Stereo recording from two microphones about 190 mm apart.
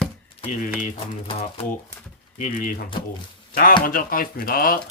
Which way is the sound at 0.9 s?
30° left (ahead or behind).